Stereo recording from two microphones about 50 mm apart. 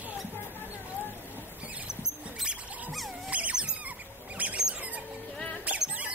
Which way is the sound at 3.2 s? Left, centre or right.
Right.